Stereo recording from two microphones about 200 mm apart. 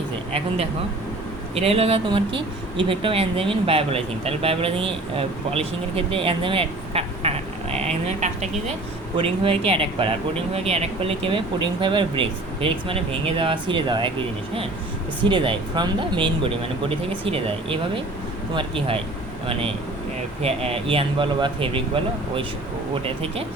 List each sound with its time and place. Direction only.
1.5 s speech: 30° right (ahead or behind)
15.2 s speech: 25° right (ahead or behind)
20.4 s speech: 30° right (ahead or behind)